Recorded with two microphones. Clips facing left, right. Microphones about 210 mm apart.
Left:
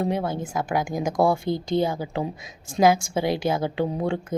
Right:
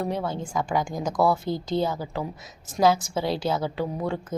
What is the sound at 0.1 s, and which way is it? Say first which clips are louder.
Speech: left 2 dB; 10° left (ahead or behind).